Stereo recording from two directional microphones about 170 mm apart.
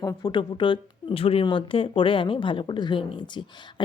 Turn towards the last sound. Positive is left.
turn(degrees=30)  # may be behind; listen again after turning